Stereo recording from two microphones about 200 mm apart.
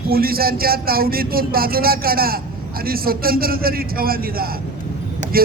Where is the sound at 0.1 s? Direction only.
50° right (ahead or behind).